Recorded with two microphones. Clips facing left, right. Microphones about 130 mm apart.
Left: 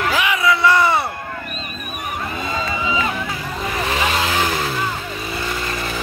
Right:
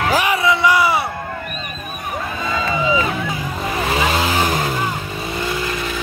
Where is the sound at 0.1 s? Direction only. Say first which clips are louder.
Right 3 dB; 40° right (ahead or behind).